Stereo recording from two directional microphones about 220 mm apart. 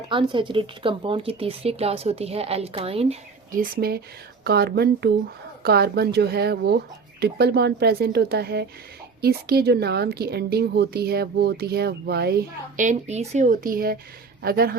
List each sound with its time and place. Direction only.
0.1 s speech: 20° right (ahead or behind); by 14.8 s 45° right (ahead or behind)